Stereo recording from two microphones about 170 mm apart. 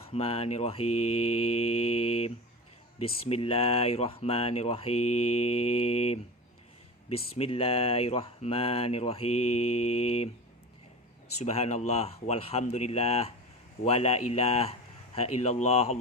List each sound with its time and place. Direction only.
0.1 s speech: 35° left (ahead or behind)
7.3 s speech: 35° left (ahead or behind)
11.3 s speech: 40° left (ahead or behind)